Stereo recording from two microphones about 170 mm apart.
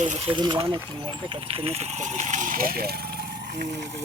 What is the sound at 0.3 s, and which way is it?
Speech, 30° right (ahead or behind).